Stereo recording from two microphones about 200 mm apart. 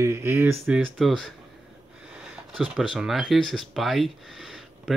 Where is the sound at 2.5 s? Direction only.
5° right (ahead or behind).